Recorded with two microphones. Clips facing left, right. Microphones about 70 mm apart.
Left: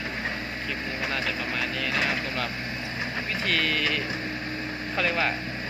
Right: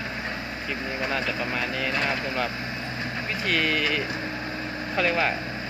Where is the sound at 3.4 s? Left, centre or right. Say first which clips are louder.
Right 2 dB; centre.